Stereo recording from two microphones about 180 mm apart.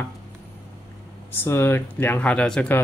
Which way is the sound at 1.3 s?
10° left (ahead or behind).